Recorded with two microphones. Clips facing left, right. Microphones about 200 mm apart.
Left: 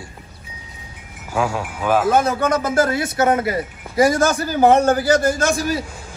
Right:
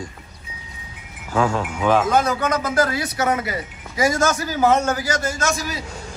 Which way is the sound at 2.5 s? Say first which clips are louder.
Left 3 dB; 25° left (ahead or behind).